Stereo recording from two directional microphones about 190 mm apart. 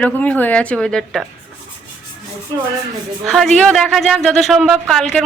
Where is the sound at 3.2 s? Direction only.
Centre (ahead or behind).